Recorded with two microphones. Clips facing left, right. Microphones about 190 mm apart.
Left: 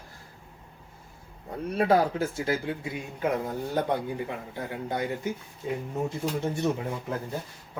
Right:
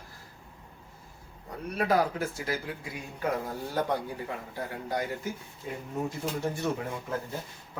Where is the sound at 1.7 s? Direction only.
30° left (ahead or behind).